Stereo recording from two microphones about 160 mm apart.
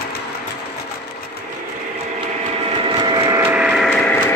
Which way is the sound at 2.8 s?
30° right (ahead or behind).